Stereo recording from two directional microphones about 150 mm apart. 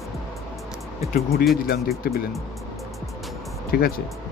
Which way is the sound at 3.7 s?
85° left.